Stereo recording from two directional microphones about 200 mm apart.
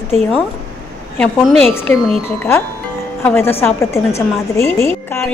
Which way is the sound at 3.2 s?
10° left (ahead or behind).